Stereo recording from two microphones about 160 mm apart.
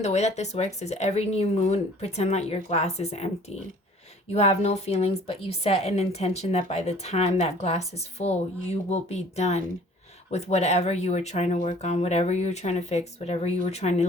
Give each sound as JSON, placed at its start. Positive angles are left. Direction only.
{"t": 0.0, "sound": "a woman's voice", "side_deg": 45}